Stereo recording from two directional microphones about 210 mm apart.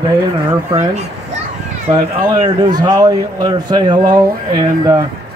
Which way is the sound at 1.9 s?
20° right (ahead or behind).